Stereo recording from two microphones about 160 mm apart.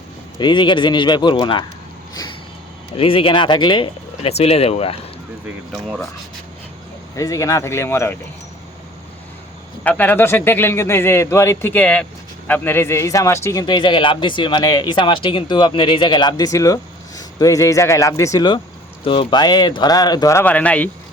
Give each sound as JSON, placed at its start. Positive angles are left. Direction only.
{"t": 0.3, "sound": "a man's voice", "side_deg": 30}
{"t": 3.0, "sound": "speech", "side_deg": 35}
{"t": 5.7, "sound": "speech", "side_deg": 0}
{"t": 7.2, "sound": "a man's voice", "side_deg": 20}
{"t": 9.8, "sound": "a man's voice", "side_deg": 10}